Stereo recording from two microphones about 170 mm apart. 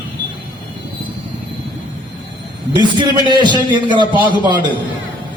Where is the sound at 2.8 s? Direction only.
25° right (ahead or behind).